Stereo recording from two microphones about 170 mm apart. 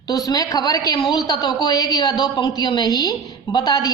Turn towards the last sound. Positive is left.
turn(degrees=20)  # may be behind; listen again after turning